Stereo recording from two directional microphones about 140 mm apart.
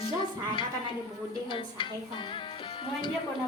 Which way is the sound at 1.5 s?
35° left (ahead or behind).